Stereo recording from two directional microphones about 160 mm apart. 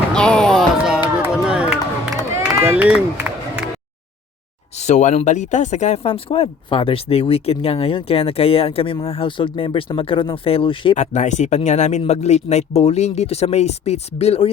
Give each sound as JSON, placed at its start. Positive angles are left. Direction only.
{"t": 0.1, "sound": "a sound", "side_deg": 5}
{"t": 1.2, "sound": "run", "side_deg": -5}
{"t": 2.6, "sound": "music", "side_deg": -10}
{"t": 4.8, "sound": "speech", "side_deg": 45}
{"t": 10.9, "sound": "speech", "side_deg": 45}